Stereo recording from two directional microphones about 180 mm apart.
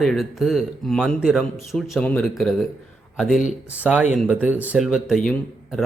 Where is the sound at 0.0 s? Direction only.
Centre (ahead or behind).